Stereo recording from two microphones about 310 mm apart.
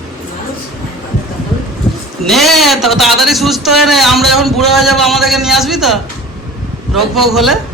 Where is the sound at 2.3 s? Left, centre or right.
Centre.